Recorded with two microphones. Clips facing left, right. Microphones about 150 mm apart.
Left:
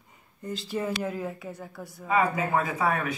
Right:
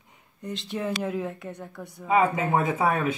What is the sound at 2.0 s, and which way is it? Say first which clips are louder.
Speech: right 3 dB; 25° right (ahead or behind).